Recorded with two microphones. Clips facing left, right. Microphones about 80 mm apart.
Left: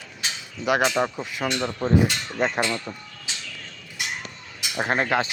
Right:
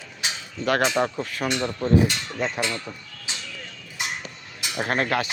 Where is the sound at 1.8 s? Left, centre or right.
Left.